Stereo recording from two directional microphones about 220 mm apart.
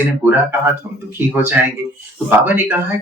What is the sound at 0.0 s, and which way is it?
Speech, 10° right (ahead or behind).